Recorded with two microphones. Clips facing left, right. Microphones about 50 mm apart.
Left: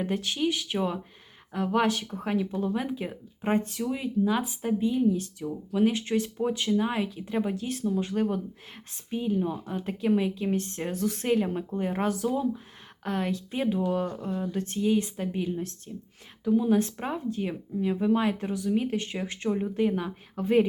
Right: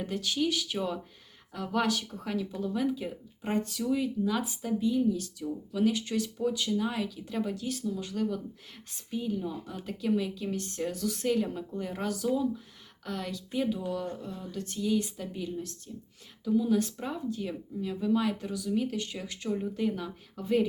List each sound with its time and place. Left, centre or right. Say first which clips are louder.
0.0 s speech: left 2 dB; left